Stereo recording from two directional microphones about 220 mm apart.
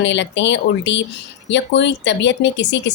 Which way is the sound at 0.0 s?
55° left (ahead or behind).